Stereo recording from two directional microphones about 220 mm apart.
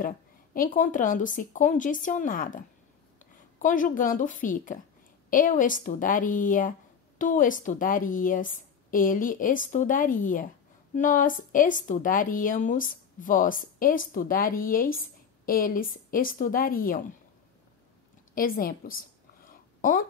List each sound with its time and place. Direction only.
0.6 s a woman's voice: 40° left (ahead or behind)
18.3 s a woman's voice: 40° left (ahead or behind)
19.4 s a sound: 35° left (ahead or behind)